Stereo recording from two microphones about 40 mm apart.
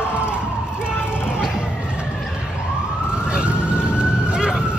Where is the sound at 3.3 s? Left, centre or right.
Right.